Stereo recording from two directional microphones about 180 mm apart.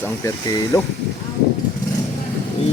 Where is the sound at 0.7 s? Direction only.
20° left (ahead or behind).